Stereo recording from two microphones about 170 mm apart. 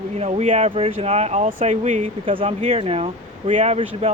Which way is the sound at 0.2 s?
40° right (ahead or behind).